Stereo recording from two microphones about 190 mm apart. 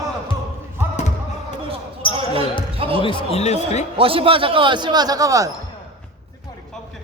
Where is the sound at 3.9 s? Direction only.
30° right (ahead or behind).